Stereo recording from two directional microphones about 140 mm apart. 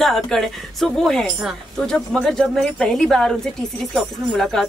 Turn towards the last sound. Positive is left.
turn(degrees=0)  # may be behind; listen again after turning